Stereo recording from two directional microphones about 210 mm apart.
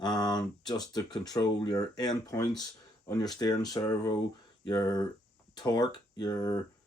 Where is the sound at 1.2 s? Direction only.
20° left (ahead or behind).